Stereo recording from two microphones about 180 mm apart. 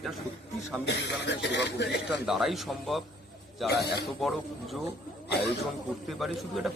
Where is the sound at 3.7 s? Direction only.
65° left (ahead or behind).